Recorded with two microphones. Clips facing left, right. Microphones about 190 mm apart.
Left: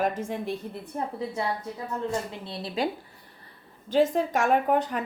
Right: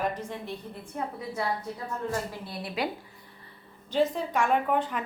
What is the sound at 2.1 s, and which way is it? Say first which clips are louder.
Speech: left 1 dB; 25° left (ahead or behind).